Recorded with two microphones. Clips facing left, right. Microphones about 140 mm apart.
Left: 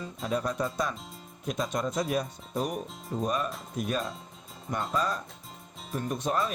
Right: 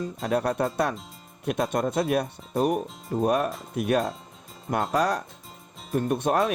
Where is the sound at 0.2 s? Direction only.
65° right (ahead or behind).